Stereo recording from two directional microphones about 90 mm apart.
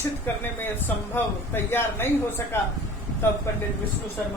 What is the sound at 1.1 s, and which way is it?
Speech, 25° left (ahead or behind).